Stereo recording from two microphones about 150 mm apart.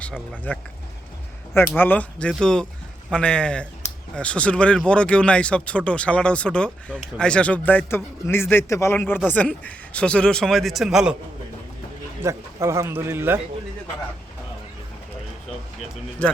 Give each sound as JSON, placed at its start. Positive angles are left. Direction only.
{"t": 0.5, "sound": "a man's voice", "side_deg": 10}
{"t": 12.2, "sound": "speech", "side_deg": -20}